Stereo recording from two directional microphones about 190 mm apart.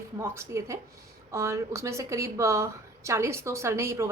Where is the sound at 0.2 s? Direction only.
15° right (ahead or behind).